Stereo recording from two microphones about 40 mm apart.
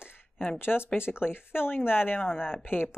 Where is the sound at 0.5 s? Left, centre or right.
Left.